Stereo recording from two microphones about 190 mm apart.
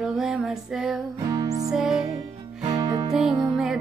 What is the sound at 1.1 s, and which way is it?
Music, 20° right (ahead or behind).